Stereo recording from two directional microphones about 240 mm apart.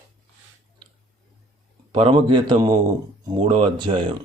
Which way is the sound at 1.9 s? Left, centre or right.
Right.